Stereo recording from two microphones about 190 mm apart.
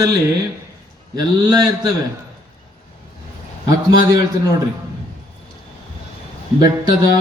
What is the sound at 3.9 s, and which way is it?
Speech, 20° right (ahead or behind).